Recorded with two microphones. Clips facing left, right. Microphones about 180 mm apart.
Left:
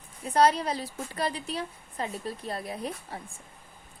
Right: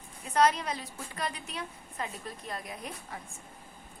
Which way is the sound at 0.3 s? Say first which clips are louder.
Left 3 dB; 35° left (ahead or behind).